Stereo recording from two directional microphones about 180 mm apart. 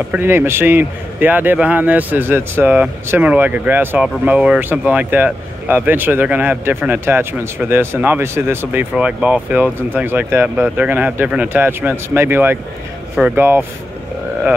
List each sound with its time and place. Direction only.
0.1 s a man's voice: 10° right (ahead or behind)